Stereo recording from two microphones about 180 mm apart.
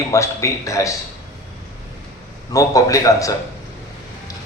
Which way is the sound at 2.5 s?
20° left (ahead or behind).